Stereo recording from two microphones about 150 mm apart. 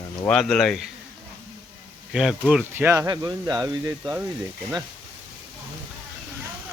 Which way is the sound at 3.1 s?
25° right (ahead or behind).